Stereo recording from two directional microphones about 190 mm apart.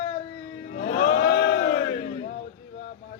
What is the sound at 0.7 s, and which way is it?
Crowd, 55° left (ahead or behind).